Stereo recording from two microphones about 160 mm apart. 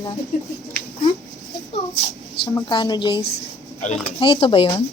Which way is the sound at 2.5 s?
30° left (ahead or behind).